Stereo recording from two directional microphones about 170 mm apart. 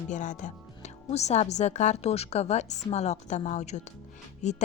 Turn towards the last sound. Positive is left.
turn(degrees=40)  # may be behind; listen again after turning